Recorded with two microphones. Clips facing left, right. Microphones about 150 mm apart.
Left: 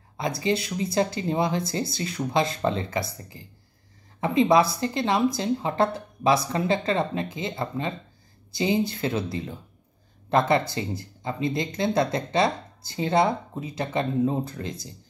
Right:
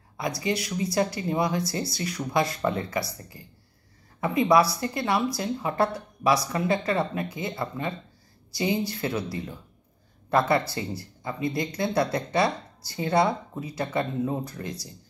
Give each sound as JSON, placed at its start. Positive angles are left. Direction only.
{"t": 0.4, "sound": "speech", "side_deg": 25}
{"t": 10.7, "sound": "speech", "side_deg": 20}